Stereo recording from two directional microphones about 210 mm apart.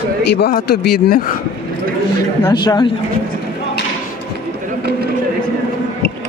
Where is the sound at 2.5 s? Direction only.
20° left (ahead or behind).